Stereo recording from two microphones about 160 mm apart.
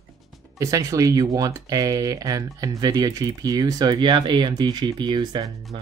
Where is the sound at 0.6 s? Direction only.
20° right (ahead or behind).